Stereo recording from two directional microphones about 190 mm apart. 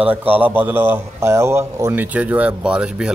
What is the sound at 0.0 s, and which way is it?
A man's voice, 10° right (ahead or behind).